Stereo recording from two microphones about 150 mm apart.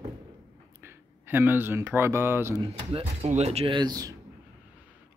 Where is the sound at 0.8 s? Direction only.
15° right (ahead or behind).